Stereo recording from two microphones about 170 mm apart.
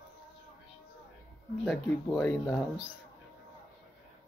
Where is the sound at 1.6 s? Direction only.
5° left (ahead or behind).